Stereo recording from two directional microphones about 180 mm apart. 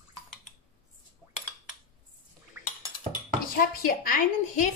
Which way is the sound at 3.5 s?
50° left (ahead or behind).